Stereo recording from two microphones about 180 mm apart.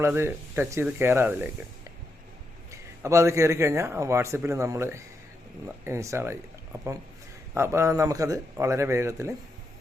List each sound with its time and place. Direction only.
0.0 s a man's voice: 15° right (ahead or behind)
3.0 s a man's voice: 15° right (ahead or behind)
7.5 s a man's voice: 15° right (ahead or behind)